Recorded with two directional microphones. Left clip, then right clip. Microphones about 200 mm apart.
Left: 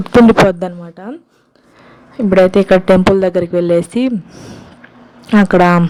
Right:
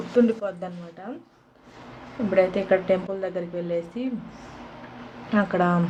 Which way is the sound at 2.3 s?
55° left (ahead or behind).